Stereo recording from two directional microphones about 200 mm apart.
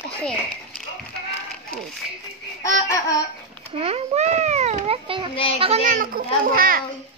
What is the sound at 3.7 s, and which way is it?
A child's voice, 30° right (ahead or behind).